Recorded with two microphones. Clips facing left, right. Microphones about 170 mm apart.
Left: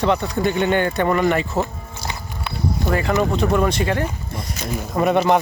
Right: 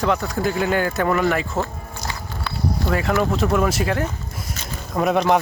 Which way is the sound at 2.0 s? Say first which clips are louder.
Left 1 dB; 20° left (ahead or behind).